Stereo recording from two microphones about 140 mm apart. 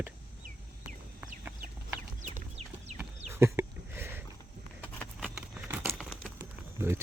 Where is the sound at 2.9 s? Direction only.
55° right (ahead or behind).